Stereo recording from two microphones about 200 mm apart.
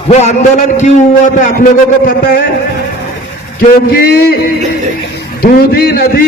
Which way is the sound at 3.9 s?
50° left (ahead or behind).